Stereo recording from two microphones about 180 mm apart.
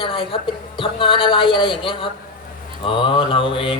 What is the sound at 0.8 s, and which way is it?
Speech, 30° left (ahead or behind).